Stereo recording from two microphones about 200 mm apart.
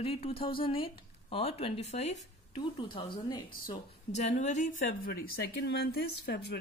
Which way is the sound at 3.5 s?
40° left (ahead or behind).